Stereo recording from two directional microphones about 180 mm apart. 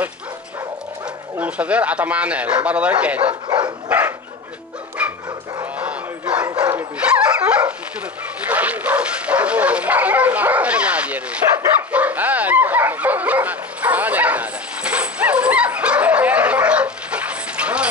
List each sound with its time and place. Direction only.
1.3 s speech: 10° right (ahead or behind)
3.4 s dog: 25° right (ahead or behind)
5.0 s dog: 5° right (ahead or behind)
5.6 s bow-wow: 5° right (ahead or behind)
6.5 s dog: 10° right (ahead or behind)
8.5 s bow-wow: 10° right (ahead or behind)
11.9 s dog: 10° right (ahead or behind)